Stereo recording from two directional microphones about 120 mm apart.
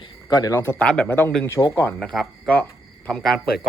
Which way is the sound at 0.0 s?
35° left (ahead or behind).